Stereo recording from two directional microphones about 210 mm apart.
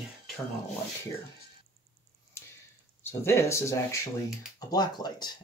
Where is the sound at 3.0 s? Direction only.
10° left (ahead or behind).